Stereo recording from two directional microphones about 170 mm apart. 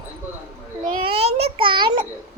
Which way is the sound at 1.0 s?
35° right (ahead or behind).